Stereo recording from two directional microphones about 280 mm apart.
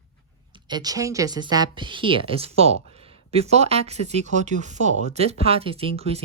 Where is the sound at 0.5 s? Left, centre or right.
Centre.